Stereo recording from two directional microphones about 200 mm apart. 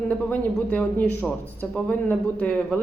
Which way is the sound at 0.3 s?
5° left (ahead or behind).